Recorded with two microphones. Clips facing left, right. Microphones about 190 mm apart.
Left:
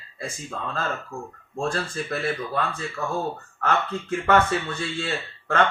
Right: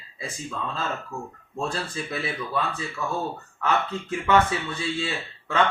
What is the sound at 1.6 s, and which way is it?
Speech, 55° left (ahead or behind).